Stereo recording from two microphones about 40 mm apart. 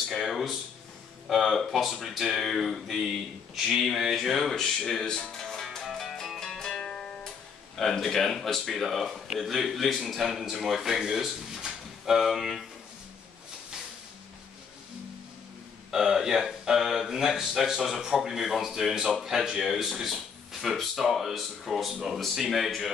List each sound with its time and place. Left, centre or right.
0.1 s a man's voice: centre
5.3 s music: centre
6.8 s music: left
7.8 s a man's voice: centre
15.9 s a man's voice: centre
19.6 s a man's voice: centre